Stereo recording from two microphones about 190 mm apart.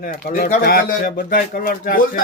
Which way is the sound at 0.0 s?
50° left (ahead or behind).